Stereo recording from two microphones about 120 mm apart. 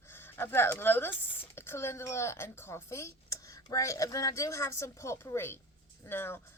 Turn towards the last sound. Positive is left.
turn(degrees=20)  # may be behind; listen again after turning